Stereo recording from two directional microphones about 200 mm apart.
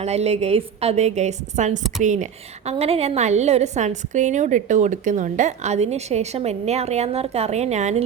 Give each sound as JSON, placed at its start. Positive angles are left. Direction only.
{"t": 0.0, "sound": "a woman's voice", "side_deg": -30}